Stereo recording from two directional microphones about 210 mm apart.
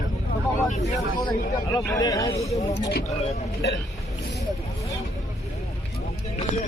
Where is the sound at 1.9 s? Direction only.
15° left (ahead or behind).